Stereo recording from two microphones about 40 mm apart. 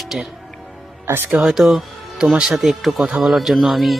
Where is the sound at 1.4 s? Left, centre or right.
Centre.